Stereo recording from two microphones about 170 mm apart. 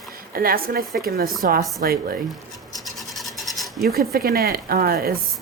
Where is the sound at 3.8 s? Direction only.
60° right (ahead or behind).